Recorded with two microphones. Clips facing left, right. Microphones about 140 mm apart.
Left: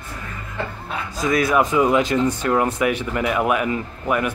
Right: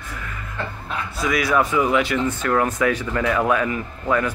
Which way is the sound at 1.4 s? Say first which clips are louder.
Left 2 dB; 20° left (ahead or behind).